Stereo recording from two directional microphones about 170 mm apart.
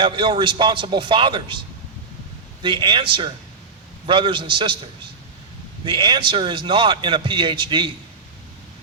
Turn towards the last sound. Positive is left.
turn(degrees=-30)  # may be behind; listen again after turning